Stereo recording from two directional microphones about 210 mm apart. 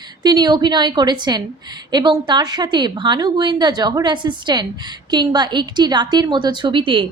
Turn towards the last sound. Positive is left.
turn(degrees=-25)  # may be behind; listen again after turning